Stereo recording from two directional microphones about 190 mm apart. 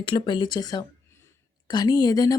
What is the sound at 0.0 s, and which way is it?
A woman's voice, 25° left (ahead or behind).